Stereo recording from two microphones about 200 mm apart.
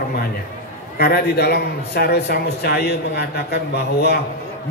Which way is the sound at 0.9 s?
50° left (ahead or behind).